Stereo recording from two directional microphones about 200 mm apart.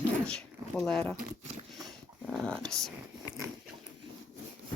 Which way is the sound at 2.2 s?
Centre (ahead or behind).